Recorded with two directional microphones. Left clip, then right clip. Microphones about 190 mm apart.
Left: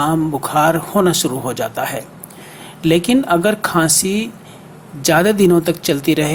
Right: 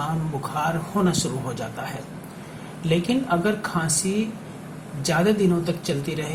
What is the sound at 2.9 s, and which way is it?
Speech, 40° left (ahead or behind).